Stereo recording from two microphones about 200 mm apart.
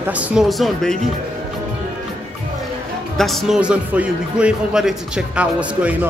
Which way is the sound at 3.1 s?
Centre (ahead or behind).